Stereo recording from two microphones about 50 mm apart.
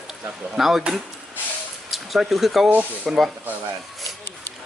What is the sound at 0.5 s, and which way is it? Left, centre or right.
Speech, centre.